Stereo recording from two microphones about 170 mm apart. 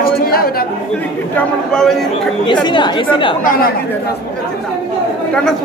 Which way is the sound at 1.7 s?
Centre (ahead or behind).